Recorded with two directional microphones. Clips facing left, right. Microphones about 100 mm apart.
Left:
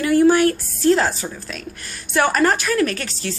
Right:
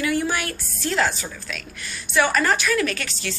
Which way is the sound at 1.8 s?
45° left (ahead or behind).